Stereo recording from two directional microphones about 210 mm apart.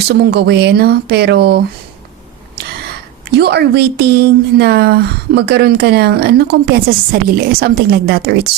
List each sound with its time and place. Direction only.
0.1 s a woman's voice: 50° right (ahead or behind)
3.2 s a woman's voice: 50° right (ahead or behind)